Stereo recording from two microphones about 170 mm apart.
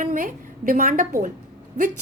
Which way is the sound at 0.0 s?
50° right (ahead or behind).